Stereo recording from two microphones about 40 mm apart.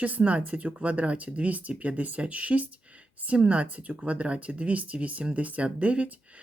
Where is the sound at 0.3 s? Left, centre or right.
Right.